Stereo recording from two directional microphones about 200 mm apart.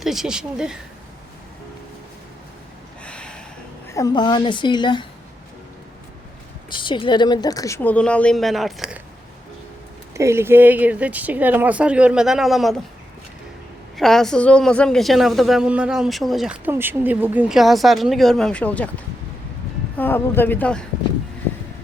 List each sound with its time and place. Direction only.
0.0 s speech: centre (ahead or behind)
3.0 s a sound: 5° left (ahead or behind)
3.8 s a woman's voice: 15° left (ahead or behind)
6.7 s speech: 25° left (ahead or behind); by 9.0 s centre (ahead or behind)
10.2 s speech: 15° right (ahead or behind)
13.9 s a woman's voice: centre (ahead or behind)
20.0 s speech: 10° left (ahead or behind)